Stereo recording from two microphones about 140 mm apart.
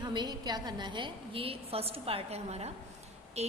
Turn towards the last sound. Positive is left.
turn(degrees=-50)  # may be behind; listen again after turning